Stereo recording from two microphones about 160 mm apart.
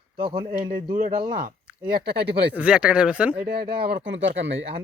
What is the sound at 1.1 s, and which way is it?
Speech, 30° right (ahead or behind).